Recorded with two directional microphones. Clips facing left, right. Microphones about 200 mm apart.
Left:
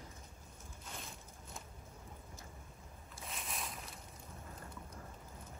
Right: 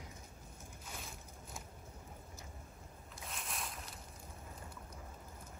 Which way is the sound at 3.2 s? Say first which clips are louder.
Even; centre (ahead or behind).